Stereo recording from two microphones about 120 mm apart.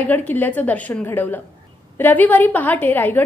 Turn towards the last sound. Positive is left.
turn(degrees=15)  # may be behind; listen again after turning